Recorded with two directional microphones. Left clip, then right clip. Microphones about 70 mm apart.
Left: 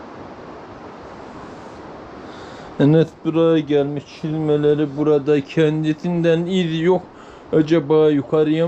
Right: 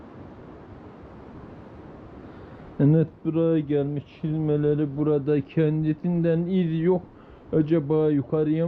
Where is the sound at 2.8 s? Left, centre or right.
Centre.